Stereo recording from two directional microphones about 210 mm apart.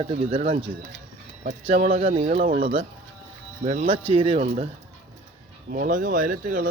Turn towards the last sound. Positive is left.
turn(degrees=-40)  # may be behind; listen again after turning